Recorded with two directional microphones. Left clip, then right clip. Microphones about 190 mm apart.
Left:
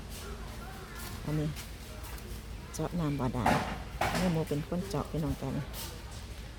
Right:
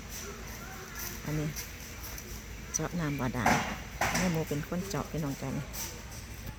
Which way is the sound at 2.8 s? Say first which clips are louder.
Even; 5° left (ahead or behind).